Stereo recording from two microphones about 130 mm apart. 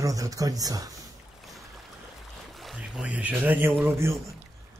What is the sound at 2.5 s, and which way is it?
Speech, centre (ahead or behind).